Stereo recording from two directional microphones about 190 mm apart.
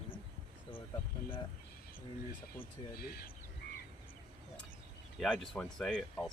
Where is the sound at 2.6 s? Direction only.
55° left (ahead or behind).